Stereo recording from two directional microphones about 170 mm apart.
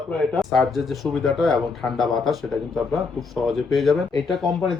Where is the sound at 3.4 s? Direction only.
Centre (ahead or behind).